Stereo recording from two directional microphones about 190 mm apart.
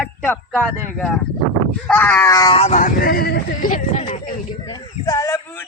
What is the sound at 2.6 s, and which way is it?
Speech, 35° left (ahead or behind).